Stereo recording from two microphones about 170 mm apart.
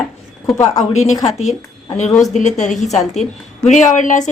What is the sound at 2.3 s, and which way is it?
Speech, 45° left (ahead or behind).